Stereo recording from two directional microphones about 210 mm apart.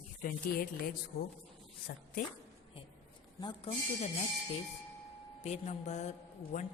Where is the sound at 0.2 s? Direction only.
45° left (ahead or behind).